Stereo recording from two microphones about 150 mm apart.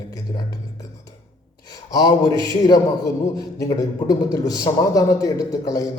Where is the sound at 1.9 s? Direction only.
25° left (ahead or behind).